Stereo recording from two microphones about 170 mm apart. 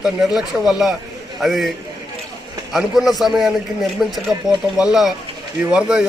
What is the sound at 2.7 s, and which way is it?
A man's voice, centre (ahead or behind).